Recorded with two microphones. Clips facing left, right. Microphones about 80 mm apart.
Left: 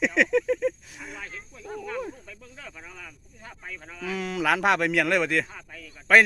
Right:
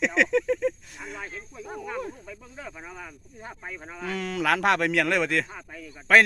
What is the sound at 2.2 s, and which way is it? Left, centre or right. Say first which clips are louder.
Speech: right 4 dB; centre.